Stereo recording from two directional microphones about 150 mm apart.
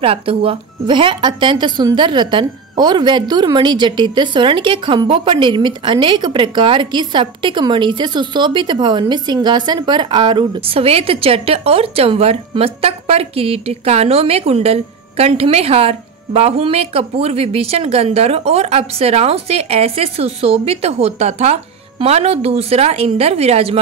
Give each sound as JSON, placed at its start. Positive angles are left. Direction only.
{"t": 0.0, "sound": "a woman's voice", "side_deg": -40}